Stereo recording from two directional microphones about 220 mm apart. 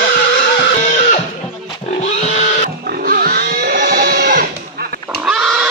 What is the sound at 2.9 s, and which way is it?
Pig, 40° right (ahead or behind).